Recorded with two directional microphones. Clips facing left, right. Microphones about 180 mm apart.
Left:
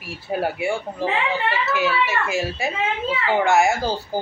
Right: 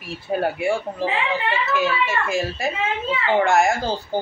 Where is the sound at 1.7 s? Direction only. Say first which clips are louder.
Even; 5° left (ahead or behind).